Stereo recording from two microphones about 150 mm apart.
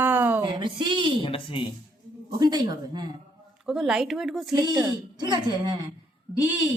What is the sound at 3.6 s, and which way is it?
Speech, 5° right (ahead or behind).